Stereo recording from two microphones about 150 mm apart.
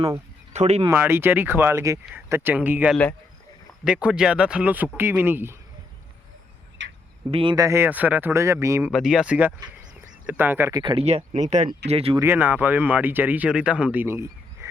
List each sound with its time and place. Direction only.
0.5 s speech: 45° right (ahead or behind)
0.9 s speech: 15° right (ahead or behind)
2.9 s a man's voice: 10° left (ahead or behind)
3.8 s speech: 5° right (ahead or behind)
7.3 s speech: 40° right (ahead or behind)
7.5 s speech: 20° right (ahead or behind)
8.9 s speech: 5° right (ahead or behind)
10.8 s speech: 35° right (ahead or behind); by 11.7 s 50° right (ahead or behind)
11.9 s speech: 40° right (ahead or behind)
12.2 s speech: 15° right (ahead or behind)